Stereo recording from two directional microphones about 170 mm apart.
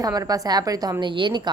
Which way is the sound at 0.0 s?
20° right (ahead or behind).